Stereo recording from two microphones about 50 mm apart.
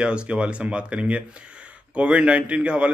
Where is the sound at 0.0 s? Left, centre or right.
Right.